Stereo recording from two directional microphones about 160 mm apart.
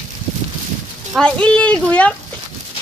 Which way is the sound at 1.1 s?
5° left (ahead or behind).